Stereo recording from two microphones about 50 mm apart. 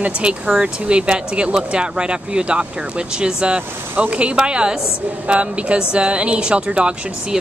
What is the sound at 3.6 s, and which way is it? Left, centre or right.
Speech, right.